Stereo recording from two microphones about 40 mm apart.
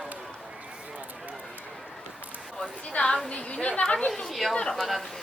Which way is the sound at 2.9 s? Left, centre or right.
Left.